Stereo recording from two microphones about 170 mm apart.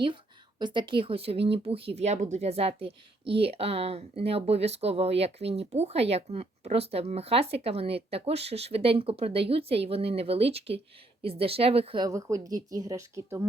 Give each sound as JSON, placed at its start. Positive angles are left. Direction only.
{"t": 0.6, "sound": "speech", "side_deg": -25}
{"t": 12.0, "sound": "speech", "side_deg": -20}